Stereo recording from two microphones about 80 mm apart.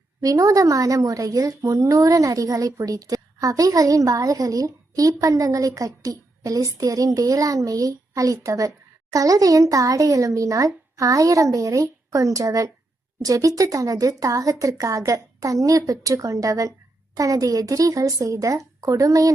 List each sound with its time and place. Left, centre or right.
0.2 s a woman's voice: right